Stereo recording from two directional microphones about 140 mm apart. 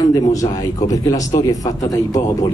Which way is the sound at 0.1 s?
25° left (ahead or behind).